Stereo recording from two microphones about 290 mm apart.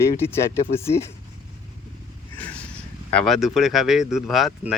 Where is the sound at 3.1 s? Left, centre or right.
Centre.